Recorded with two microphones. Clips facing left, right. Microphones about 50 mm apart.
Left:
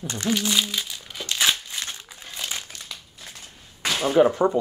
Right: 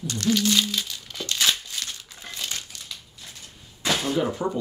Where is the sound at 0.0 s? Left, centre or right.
Left.